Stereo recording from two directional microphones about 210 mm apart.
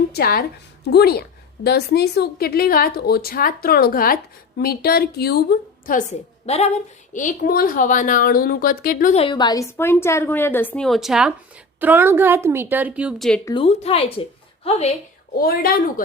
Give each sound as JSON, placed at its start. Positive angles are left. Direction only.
{"t": 0.1, "sound": "a woman's voice", "side_deg": 45}
{"t": 9.2, "sound": "a woman's voice", "side_deg": 20}
{"t": 13.4, "sound": "speech", "side_deg": 25}
{"t": 15.4, "sound": "speech", "side_deg": 45}